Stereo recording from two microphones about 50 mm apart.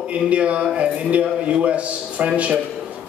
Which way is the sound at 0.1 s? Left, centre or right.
Right.